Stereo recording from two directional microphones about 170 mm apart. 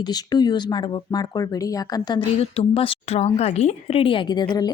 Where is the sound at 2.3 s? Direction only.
35° left (ahead or behind).